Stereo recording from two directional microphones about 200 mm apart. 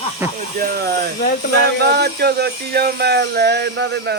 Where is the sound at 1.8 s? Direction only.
55° right (ahead or behind).